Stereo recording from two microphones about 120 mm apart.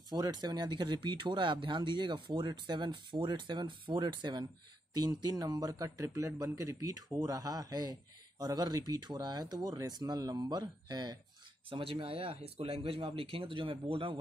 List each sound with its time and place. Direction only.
0.1 s speech: 35° right (ahead or behind)
11.7 s speech: 50° right (ahead or behind)